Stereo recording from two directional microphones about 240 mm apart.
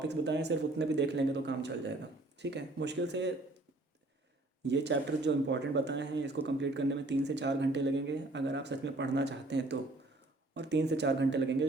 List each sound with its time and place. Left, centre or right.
0.0 s speech: right
4.6 s speech: right